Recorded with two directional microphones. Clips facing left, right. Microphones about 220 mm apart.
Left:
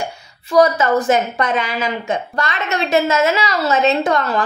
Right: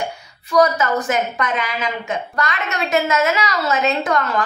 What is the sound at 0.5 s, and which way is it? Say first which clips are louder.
A woman's voice: left 3 dB; 30° left (ahead or behind).